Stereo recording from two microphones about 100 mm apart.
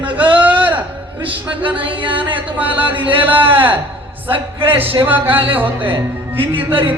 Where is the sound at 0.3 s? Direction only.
15° right (ahead or behind).